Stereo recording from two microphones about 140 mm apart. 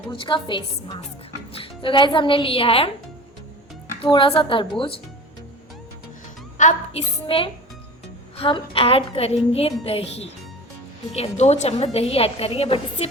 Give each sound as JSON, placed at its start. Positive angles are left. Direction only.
{"t": 0.1, "sound": "a woman's voice", "side_deg": 35}
{"t": 4.0, "sound": "a woman's voice", "side_deg": 40}
{"t": 6.6, "sound": "music", "side_deg": 60}
{"t": 7.3, "sound": "a woman's voice", "side_deg": 40}